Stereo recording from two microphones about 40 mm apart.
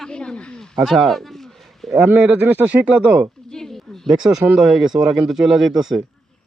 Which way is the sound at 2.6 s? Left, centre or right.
Right.